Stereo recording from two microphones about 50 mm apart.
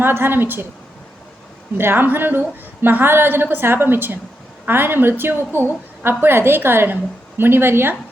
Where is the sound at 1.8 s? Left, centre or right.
Right.